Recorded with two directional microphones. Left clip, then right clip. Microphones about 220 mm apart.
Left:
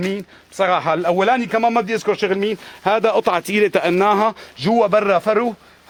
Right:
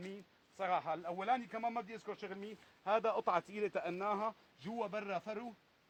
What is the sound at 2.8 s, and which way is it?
A man's voice, 45° left (ahead or behind).